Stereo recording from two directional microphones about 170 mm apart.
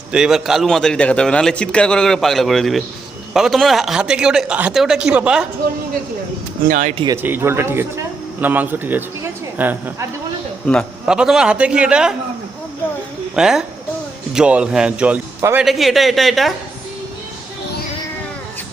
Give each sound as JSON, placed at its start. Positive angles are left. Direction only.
{"t": 0.1, "sound": "a man's voice", "side_deg": -5}
{"t": 6.7, "sound": "speech", "side_deg": -50}
{"t": 7.2, "sound": "speech", "side_deg": -10}
{"t": 10.7, "sound": "a man's voice", "side_deg": 0}
{"t": 13.3, "sound": "a man's voice", "side_deg": -5}
{"t": 15.6, "sound": "a man's voice", "side_deg": 0}